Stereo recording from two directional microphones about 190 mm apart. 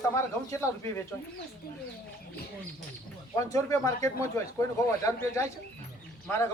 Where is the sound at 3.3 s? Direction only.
15° left (ahead or behind).